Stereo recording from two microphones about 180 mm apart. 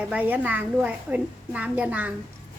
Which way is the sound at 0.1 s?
10° right (ahead or behind).